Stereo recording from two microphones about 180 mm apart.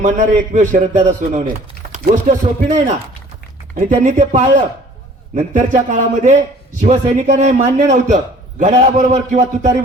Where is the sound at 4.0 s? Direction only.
45° right (ahead or behind).